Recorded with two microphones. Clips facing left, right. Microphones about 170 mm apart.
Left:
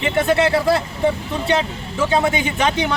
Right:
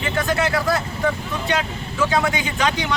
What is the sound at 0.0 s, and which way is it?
Speech, 25° left (ahead or behind).